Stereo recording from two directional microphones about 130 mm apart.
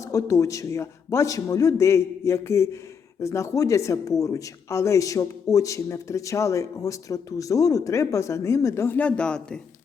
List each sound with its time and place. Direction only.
0.0 s a man's voice: 25° left (ahead or behind); by 9.6 s 5° left (ahead or behind)